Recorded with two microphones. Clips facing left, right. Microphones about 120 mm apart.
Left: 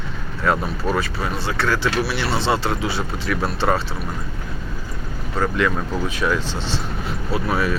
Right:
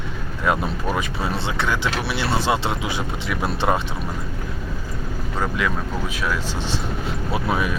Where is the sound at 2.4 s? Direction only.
10° right (ahead or behind).